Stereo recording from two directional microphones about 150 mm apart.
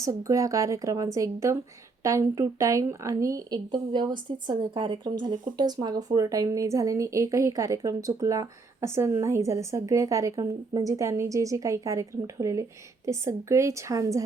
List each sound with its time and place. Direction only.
0.0 s speech: 20° right (ahead or behind)